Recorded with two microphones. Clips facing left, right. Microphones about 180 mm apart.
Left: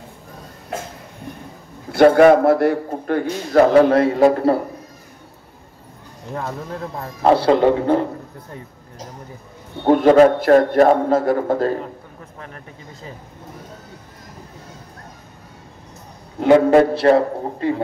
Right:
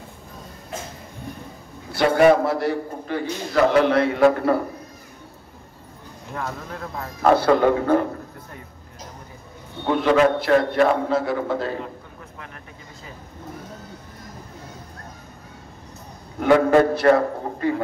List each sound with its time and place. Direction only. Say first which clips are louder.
1.9 s a man's voice: left 5 dB; 55° left (ahead or behind)
3.7 s a man's voice: left 5 dB; 40° left (ahead or behind)
6.3 s a man's voice: left 4 dB; 30° left (ahead or behind)
9.8 s a man's voice: left 6 dB; 45° left (ahead or behind)
16.3 s a man's voice: left 4 dB; 25° left (ahead or behind)